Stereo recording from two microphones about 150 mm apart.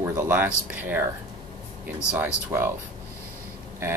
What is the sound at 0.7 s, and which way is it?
Speech, 10° right (ahead or behind).